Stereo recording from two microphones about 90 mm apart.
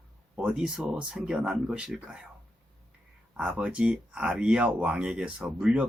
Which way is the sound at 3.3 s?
10° right (ahead or behind).